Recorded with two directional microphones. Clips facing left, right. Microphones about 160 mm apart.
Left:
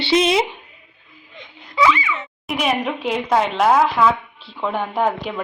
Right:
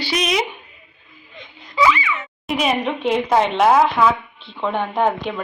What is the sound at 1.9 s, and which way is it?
Speech, 25° left (ahead or behind).